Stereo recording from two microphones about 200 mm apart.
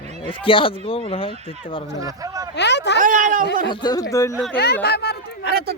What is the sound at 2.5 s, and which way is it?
Speech, 60° left (ahead or behind).